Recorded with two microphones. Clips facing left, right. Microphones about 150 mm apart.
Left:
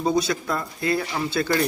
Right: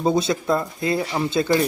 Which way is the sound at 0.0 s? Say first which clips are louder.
Right 2 dB; 25° right (ahead or behind).